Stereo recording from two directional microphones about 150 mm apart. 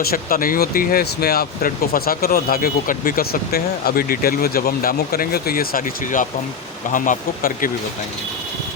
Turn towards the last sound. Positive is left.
turn(degrees=65)  # may be behind; listen again after turning